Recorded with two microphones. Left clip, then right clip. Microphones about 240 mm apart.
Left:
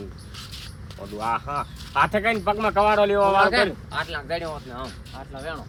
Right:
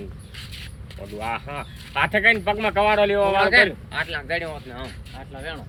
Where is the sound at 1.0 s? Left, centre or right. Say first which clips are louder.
Left 3 dB; centre.